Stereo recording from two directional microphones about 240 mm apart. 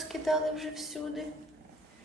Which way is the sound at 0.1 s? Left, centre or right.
Centre.